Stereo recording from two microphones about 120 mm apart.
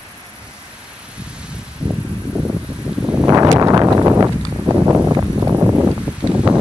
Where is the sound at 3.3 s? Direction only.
25° right (ahead or behind).